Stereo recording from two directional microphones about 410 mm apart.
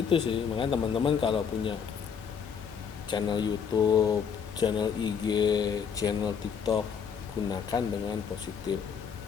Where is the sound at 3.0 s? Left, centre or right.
Centre.